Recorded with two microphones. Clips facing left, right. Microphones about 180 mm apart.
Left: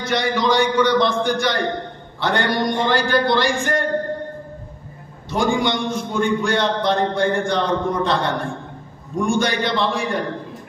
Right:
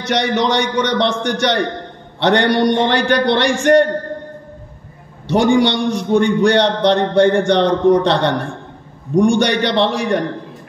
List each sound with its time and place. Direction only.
0.1 s a man's voice: 70° right (ahead or behind)
5.3 s a man's voice: 70° right (ahead or behind)